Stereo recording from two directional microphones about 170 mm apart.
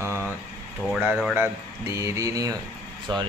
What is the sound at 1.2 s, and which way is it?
Speech, 10° right (ahead or behind).